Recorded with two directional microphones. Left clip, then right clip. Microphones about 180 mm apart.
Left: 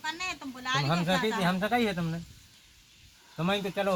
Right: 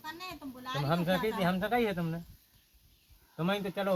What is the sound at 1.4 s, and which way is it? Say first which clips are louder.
Speech: left 2 dB; 45° left (ahead or behind).